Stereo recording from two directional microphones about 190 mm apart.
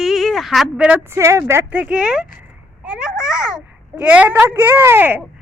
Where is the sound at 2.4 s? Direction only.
5° right (ahead or behind).